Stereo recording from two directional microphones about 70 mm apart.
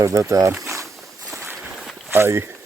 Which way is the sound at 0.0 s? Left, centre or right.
Right.